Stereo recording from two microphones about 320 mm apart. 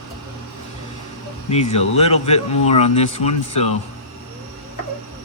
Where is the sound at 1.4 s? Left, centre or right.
Centre.